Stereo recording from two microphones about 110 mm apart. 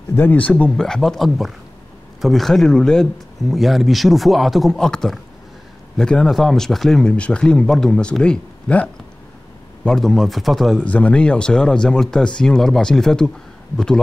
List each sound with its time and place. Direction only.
0.1 s speech: 15° left (ahead or behind)